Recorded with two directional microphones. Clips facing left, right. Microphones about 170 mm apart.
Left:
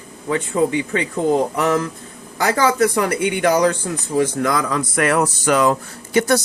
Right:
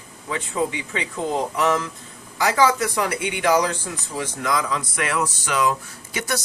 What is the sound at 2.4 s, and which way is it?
Speech, 50° left (ahead or behind).